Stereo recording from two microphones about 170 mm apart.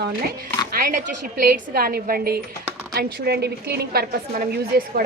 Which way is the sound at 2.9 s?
75° right (ahead or behind).